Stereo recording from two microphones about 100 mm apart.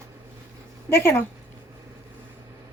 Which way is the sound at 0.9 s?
25° left (ahead or behind).